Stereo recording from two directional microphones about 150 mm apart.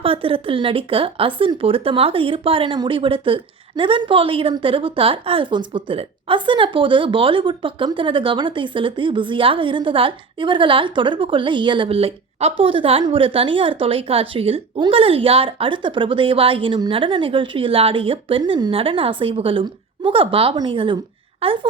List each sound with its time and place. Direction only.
0.0 s speech: 35° right (ahead or behind)